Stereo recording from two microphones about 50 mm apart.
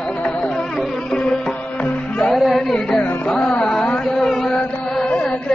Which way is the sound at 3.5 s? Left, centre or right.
Centre.